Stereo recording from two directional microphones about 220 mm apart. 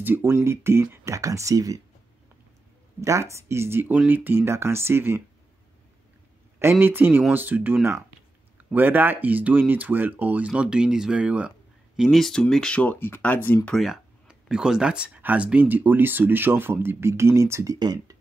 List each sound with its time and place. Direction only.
0.0 s speech: 10° right (ahead or behind)
3.0 s speech: 15° right (ahead or behind)
6.6 s speech: 10° right (ahead or behind)